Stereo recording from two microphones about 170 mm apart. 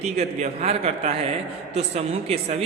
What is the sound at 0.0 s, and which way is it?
A woman's voice, 40° right (ahead or behind).